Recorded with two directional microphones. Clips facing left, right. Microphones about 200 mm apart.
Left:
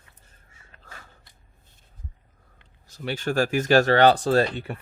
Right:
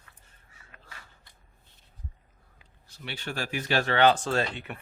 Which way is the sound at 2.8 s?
45° left (ahead or behind).